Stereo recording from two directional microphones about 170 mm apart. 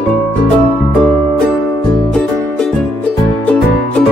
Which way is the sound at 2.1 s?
5° left (ahead or behind).